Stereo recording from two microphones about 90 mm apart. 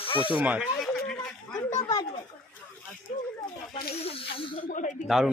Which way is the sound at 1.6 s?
45° left (ahead or behind).